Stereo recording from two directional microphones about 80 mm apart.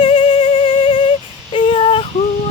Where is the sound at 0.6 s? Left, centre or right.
Left.